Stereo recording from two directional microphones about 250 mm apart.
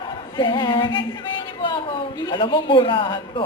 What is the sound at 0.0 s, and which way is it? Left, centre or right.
Speech, centre.